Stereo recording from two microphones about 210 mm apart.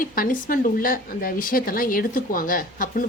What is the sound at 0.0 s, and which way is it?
Speech, 40° left (ahead or behind).